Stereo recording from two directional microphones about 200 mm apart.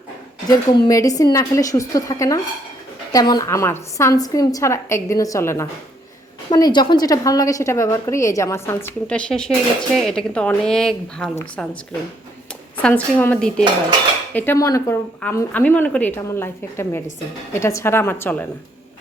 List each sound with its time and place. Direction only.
0.4 s a woman's voice: 20° left (ahead or behind)